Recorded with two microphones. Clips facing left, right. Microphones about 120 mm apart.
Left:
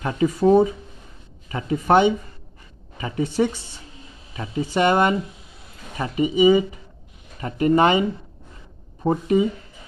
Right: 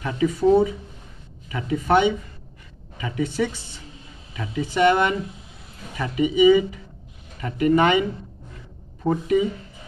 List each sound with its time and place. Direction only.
0.0 s speech: 40° left (ahead or behind)
1.5 s speech: 35° left (ahead or behind)
9.0 s speech: 30° left (ahead or behind)